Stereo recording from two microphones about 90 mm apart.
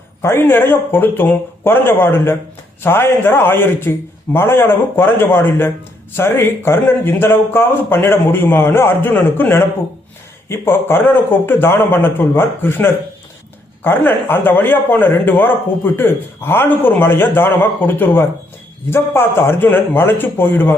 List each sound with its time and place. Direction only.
0.2 s a man's voice: 30° left (ahead or behind)